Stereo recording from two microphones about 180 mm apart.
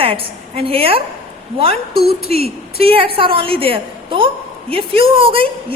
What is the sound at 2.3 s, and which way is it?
A woman's voice, 35° right (ahead or behind).